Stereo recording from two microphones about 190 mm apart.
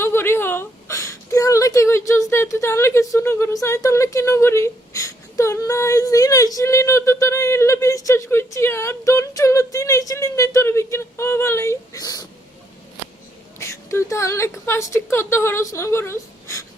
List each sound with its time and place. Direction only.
0.0 s a woman's voice: 10° left (ahead or behind)
13.6 s a woman's voice: 15° left (ahead or behind)